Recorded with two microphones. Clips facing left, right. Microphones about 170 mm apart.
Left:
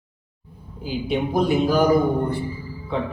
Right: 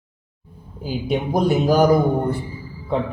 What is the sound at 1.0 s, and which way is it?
Speech, 40° right (ahead or behind).